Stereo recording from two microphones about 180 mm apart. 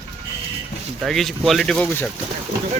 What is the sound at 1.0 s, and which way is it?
Speech, centre (ahead or behind).